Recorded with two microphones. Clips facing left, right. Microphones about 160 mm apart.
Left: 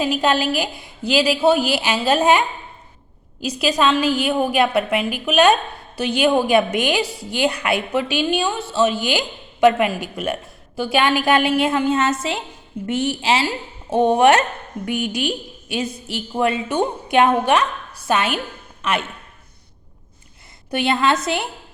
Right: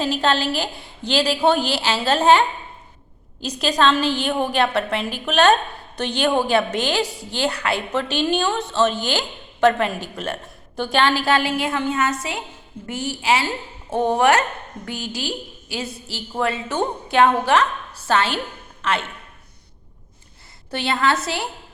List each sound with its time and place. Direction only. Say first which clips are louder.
0.0 s speech: left 2 dB; 10° left (ahead or behind)
3.4 s a woman's voice: left 1 dB; 10° left (ahead or behind)
20.7 s a woman's voice: left 3 dB; 15° left (ahead or behind)